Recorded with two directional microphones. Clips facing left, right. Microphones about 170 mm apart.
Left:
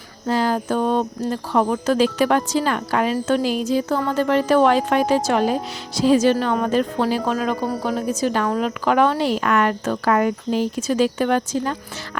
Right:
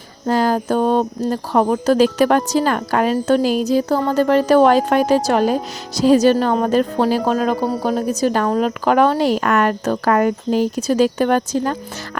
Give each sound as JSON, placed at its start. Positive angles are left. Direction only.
{"t": 0.3, "sound": "speech", "side_deg": -45}